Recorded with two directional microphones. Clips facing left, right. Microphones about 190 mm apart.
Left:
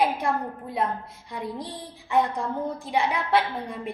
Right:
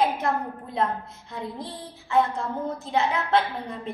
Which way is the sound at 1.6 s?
15° left (ahead or behind).